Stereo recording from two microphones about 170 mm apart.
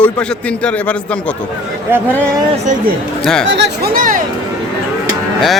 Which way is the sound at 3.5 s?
90° right.